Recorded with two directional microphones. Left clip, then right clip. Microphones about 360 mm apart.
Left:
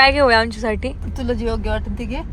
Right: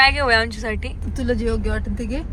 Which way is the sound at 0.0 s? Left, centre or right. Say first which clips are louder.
Left 3 dB; centre.